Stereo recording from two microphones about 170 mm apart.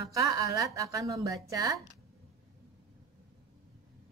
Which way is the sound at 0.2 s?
20° right (ahead or behind).